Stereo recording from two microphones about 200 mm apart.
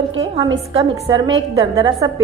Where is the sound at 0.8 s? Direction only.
30° right (ahead or behind).